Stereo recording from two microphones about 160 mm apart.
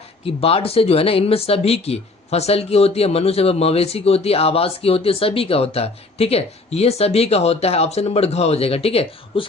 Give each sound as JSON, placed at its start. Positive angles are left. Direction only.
{"t": 0.3, "sound": "speech", "side_deg": 35}